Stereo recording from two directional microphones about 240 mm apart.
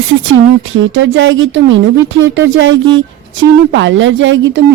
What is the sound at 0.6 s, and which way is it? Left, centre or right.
A woman's voice, right.